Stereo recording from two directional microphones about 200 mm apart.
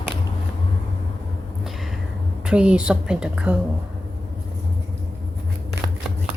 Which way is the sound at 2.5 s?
5° right (ahead or behind).